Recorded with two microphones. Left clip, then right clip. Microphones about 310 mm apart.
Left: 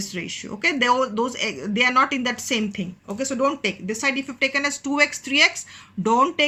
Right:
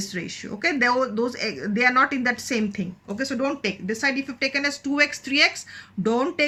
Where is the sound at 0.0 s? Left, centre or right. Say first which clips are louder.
Left 1 dB; centre.